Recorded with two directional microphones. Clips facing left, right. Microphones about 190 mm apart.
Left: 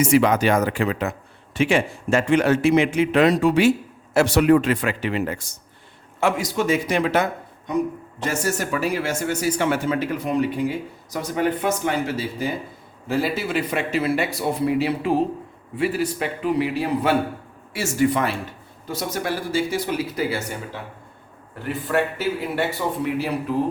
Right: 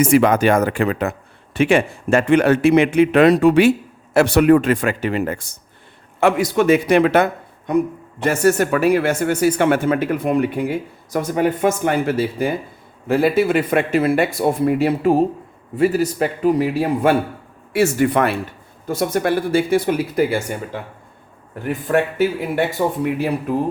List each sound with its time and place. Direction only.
0.0 s a man's voice: 50° right (ahead or behind)
17.7 s speech: 60° right (ahead or behind)
22.8 s a man's voice: 40° right (ahead or behind)